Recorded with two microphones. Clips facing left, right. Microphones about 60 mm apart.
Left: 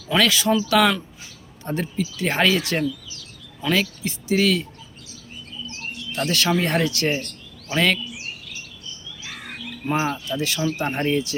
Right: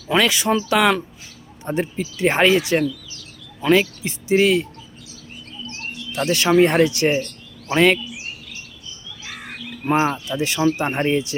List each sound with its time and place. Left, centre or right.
0.1 s speech: right
6.3 s speech: right
10.0 s speech: centre